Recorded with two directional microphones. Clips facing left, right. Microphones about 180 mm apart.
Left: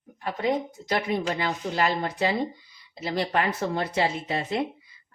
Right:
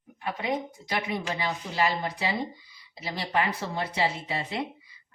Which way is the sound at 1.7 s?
50° left (ahead or behind).